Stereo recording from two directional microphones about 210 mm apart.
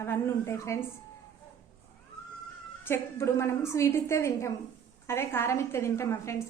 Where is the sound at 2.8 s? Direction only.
10° left (ahead or behind).